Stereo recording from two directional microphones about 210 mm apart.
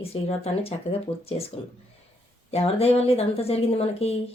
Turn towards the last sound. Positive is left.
turn(degrees=30)  # may be behind; listen again after turning